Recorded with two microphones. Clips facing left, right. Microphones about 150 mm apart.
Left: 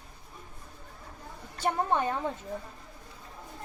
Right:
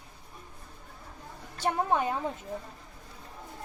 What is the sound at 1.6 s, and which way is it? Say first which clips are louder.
Speech: even; 5° right (ahead or behind).